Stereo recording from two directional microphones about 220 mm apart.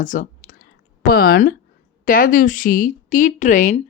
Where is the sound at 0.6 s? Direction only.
45° left (ahead or behind).